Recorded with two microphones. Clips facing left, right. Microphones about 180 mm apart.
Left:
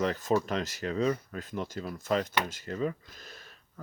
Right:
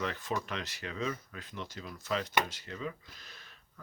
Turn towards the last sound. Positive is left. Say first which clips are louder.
# left 6 dB
turn(degrees=45)  # may be behind; listen again after turning